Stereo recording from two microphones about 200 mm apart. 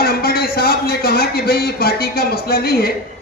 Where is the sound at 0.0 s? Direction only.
50° left (ahead or behind).